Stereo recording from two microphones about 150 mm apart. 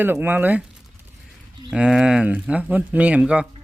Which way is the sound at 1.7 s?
5° right (ahead or behind).